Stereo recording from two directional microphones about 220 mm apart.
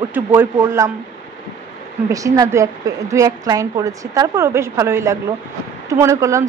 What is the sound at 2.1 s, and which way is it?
A woman's voice, 15° right (ahead or behind).